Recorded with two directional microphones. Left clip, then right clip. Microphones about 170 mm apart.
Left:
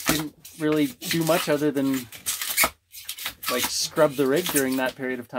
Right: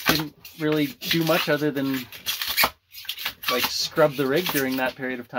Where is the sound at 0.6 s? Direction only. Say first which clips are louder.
Even; 20° left (ahead or behind).